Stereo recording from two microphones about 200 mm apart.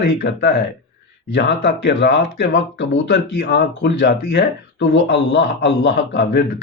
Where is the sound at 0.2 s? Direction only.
60° left (ahead or behind).